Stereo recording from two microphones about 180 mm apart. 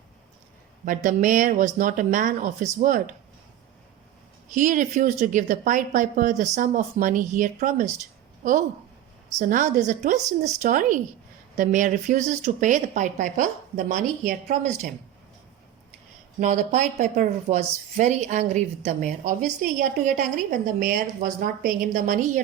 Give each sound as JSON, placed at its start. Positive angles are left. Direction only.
{"t": 0.9, "sound": "a woman's voice", "side_deg": -45}
{"t": 4.4, "sound": "a woman's voice", "side_deg": -45}
{"t": 16.4, "sound": "a woman's voice", "side_deg": -45}